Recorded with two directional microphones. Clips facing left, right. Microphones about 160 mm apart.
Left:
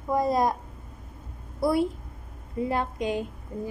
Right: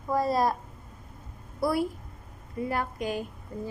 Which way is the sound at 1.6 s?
25° left (ahead or behind).